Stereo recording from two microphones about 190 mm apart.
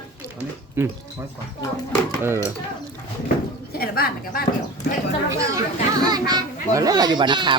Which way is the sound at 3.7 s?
55° left (ahead or behind).